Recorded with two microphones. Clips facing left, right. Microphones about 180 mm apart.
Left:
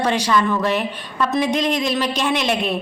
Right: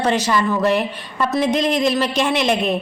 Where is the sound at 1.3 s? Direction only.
10° left (ahead or behind).